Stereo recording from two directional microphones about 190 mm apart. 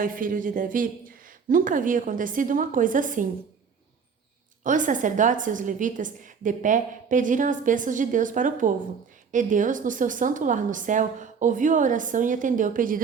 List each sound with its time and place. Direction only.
0.0 s a woman's voice: 45° right (ahead or behind)
4.6 s a woman's voice: 45° right (ahead or behind)